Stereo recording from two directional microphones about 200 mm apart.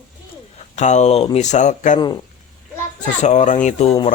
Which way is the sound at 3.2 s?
35° left (ahead or behind).